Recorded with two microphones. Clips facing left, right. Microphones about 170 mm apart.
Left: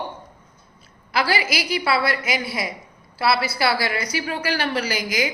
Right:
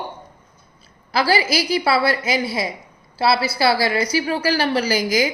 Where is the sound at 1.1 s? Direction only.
35° right (ahead or behind).